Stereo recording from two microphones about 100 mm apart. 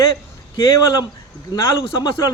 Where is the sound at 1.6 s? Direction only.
30° left (ahead or behind).